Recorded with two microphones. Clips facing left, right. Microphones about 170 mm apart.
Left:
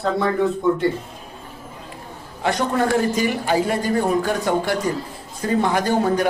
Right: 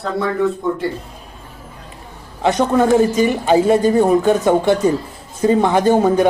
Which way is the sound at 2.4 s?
20° right (ahead or behind).